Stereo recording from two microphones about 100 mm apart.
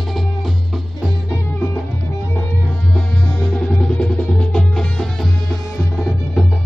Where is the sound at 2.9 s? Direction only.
5° left (ahead or behind).